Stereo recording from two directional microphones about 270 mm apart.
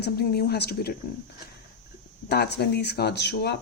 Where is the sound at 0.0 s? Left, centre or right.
Left.